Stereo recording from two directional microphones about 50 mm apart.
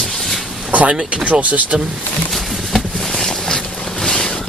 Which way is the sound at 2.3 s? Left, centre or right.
Centre.